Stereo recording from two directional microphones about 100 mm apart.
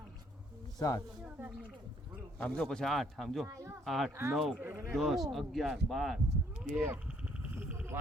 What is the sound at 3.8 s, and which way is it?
Speech, centre (ahead or behind).